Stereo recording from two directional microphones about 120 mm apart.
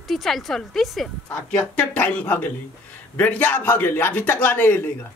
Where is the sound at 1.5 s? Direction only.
15° left (ahead or behind).